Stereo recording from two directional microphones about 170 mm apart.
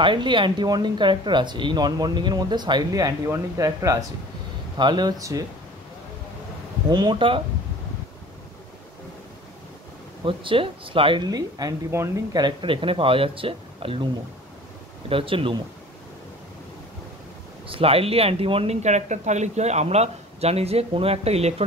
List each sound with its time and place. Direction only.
0.0 s speech: 30° right (ahead or behind)
6.9 s speech: 25° right (ahead or behind)
10.2 s speech: 30° right (ahead or behind)
15.0 s speech: 30° right (ahead or behind)
17.6 s speech: 35° right (ahead or behind)